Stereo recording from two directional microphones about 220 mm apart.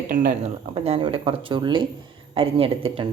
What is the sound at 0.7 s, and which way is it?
Speech, 25° right (ahead or behind).